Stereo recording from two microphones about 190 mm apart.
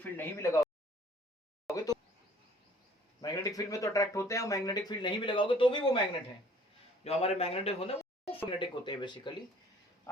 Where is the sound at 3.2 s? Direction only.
20° left (ahead or behind).